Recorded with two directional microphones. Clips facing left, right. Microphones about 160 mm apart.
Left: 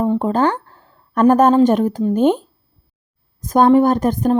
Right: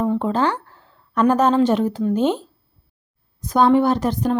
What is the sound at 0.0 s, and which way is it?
A woman's voice, 40° left (ahead or behind).